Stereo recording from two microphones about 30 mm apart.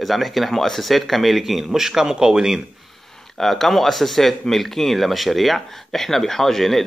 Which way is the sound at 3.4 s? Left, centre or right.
Centre.